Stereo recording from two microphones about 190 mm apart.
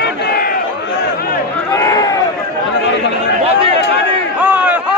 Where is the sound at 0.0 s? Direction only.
55° left (ahead or behind).